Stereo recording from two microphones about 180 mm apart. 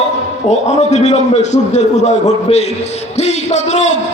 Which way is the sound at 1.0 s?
40° left (ahead or behind).